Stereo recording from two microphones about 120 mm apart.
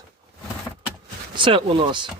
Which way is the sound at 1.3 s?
40° right (ahead or behind).